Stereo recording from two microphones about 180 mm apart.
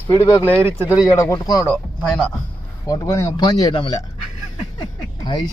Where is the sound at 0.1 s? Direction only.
15° left (ahead or behind).